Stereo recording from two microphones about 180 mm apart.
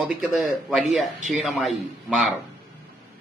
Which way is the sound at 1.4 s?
Centre (ahead or behind).